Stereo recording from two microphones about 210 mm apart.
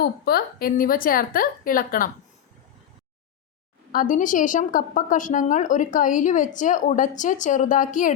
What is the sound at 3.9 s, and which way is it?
A woman's voice, 40° left (ahead or behind).